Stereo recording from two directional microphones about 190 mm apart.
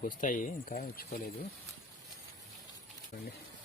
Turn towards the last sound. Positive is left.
turn(degrees=45)  # may be behind; listen again after turning